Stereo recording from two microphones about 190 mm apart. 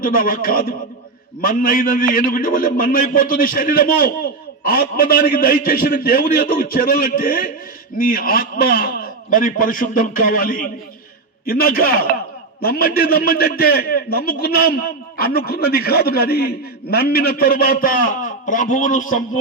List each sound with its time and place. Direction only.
0.0 s a man's voice: 50° left (ahead or behind)